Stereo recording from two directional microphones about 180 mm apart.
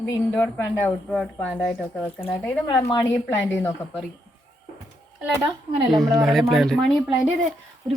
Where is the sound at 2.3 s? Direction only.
5° left (ahead or behind).